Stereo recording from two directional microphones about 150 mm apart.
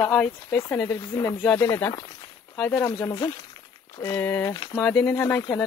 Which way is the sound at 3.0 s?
25° left (ahead or behind).